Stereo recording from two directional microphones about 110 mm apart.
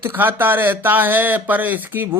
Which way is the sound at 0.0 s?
20° right (ahead or behind).